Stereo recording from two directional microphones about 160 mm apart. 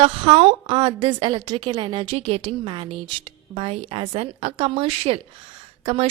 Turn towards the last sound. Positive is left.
turn(degrees=-40)  # may be behind; listen again after turning